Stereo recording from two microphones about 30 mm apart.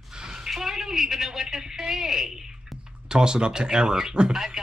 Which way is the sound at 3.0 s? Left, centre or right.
Right.